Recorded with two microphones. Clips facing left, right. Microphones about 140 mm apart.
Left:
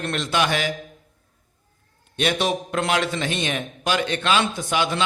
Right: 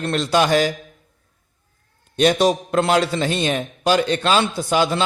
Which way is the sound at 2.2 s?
40° right (ahead or behind).